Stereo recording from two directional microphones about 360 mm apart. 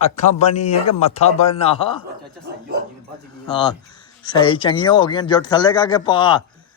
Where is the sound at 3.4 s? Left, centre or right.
Centre.